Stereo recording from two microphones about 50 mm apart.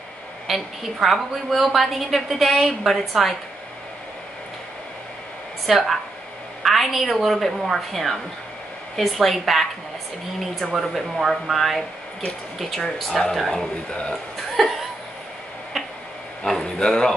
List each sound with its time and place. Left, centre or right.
0.5 s a woman's voice: centre
5.7 s a woman's voice: centre
10.7 s a woman's voice: centre
13.8 s speech: centre
14.6 s a woman's voice: centre
16.6 s a man's voice: centre